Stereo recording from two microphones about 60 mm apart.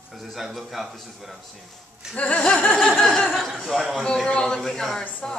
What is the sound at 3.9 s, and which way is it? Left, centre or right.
Music, centre.